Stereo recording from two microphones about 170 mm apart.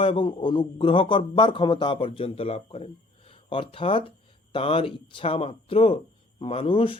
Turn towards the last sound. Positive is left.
turn(degrees=30)  # may be behind; listen again after turning